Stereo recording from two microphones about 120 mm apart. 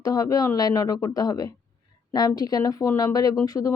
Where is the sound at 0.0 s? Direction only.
30° left (ahead or behind).